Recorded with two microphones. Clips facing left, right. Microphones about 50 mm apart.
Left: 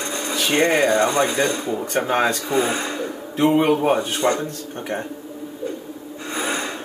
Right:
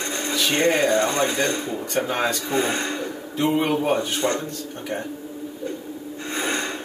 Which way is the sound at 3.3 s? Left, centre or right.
Centre.